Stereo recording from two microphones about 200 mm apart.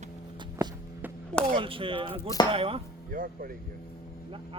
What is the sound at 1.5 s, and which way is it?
Speech, 25° right (ahead or behind).